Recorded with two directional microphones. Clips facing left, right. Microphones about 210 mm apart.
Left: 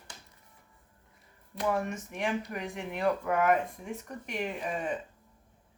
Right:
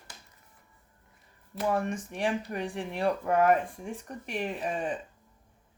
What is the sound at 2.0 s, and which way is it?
Speech, 35° right (ahead or behind).